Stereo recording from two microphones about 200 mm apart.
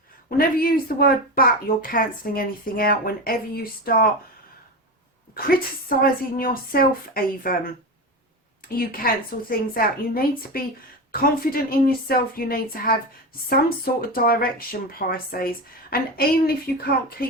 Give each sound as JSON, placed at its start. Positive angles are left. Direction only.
{"t": 0.3, "sound": "speech", "side_deg": 45}
{"t": 5.3, "sound": "a woman's voice", "side_deg": 45}
{"t": 8.6, "sound": "speech", "side_deg": 45}